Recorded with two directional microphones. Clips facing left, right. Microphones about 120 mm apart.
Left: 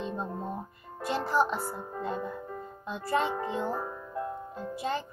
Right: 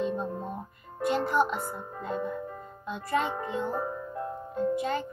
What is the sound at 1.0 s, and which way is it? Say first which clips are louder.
A child's voice: right 2 dB; 35° left (ahead or behind).